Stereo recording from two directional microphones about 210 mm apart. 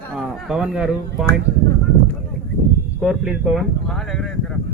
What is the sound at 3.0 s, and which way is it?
Speech, 5° right (ahead or behind).